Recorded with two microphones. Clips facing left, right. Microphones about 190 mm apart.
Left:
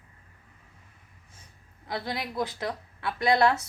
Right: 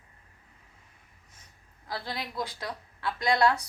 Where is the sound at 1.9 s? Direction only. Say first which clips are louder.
Left 3 dB; 20° left (ahead or behind).